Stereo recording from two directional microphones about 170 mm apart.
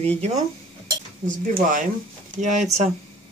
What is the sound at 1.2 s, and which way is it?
Speech, 50° right (ahead or behind).